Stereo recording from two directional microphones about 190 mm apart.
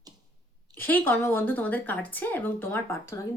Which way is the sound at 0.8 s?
10° left (ahead or behind).